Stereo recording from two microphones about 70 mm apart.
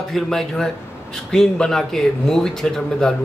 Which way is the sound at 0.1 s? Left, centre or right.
Centre.